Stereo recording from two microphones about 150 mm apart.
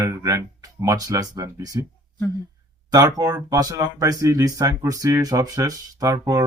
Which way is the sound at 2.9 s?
25° right (ahead or behind).